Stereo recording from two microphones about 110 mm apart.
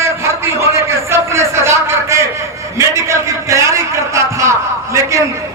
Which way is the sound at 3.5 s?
25° right (ahead or behind).